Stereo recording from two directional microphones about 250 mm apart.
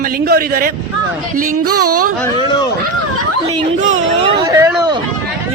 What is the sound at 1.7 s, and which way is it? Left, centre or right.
Speech, right.